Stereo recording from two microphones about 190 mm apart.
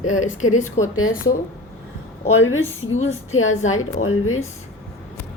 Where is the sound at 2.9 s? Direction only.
90° left.